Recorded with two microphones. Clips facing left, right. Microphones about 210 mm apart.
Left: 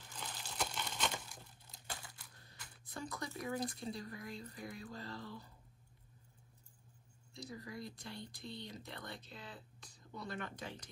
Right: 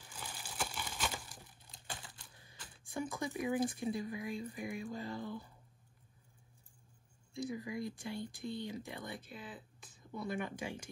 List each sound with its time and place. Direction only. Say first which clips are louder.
0.0 s crushing: even; 10° right (ahead or behind)
1.9 s a sound: right 1 dB; 25° right (ahead or behind)
3.0 s speech: right 6 dB; 10° right (ahead or behind)
7.5 s speech: right 7 dB; 10° right (ahead or behind)